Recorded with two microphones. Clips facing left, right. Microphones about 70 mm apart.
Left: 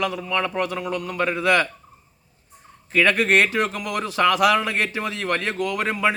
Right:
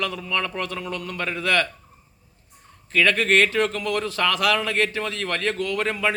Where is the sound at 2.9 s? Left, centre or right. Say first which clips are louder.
Left 1 dB; centre.